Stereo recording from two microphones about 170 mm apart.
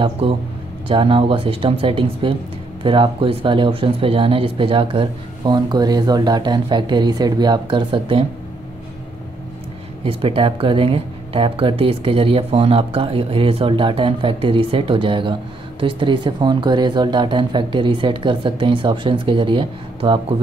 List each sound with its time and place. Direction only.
0.0 s speech: 30° right (ahead or behind)
10.0 s speech: 30° right (ahead or behind)